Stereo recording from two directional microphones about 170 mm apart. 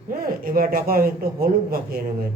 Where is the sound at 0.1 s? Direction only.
60° right (ahead or behind).